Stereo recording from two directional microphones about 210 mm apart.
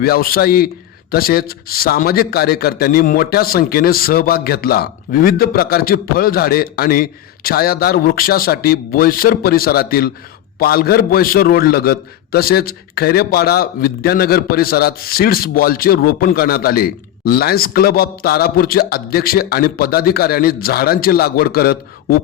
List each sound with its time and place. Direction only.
0.0 s a man's voice: 45° left (ahead or behind)